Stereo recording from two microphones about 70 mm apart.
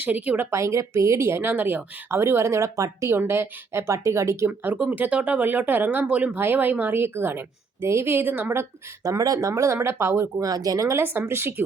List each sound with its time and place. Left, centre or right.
0.0 s speech: right
0.5 s a woman's voice: right
3.2 s a woman's voice: right
4.4 s a woman's voice: right
9.0 s speech: right
10.4 s speech: right
11.0 s a woman's voice: right